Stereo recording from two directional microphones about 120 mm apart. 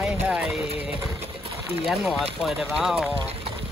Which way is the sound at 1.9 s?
Centre (ahead or behind).